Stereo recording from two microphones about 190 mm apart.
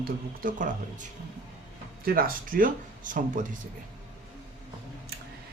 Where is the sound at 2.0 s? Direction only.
50° right (ahead or behind).